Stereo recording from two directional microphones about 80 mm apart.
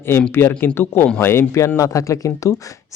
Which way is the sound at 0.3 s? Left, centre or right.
Left.